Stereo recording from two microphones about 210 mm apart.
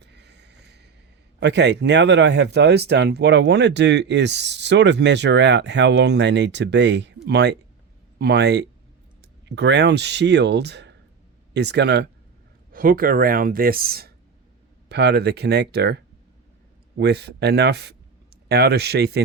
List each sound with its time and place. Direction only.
0.0 s a sound: 55° right (ahead or behind)
1.4 s speech: 55° right (ahead or behind)
12.7 s speech: 40° right (ahead or behind)
17.0 s speech: 50° right (ahead or behind)